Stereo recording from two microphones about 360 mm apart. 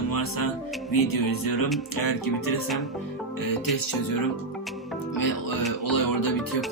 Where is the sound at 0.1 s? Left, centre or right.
Left.